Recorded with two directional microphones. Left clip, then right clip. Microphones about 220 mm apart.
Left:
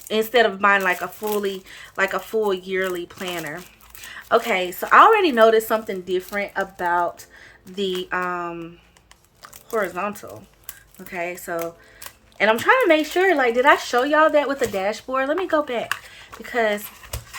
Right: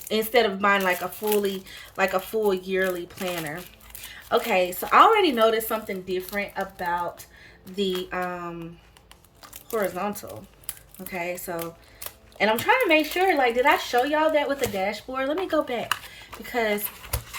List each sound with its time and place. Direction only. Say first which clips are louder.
0.1 s speech: left 4 dB; 10° left (ahead or behind)
9.7 s speech: left 3 dB; 10° left (ahead or behind)